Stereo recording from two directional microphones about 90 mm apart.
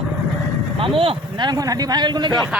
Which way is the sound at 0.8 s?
85° right.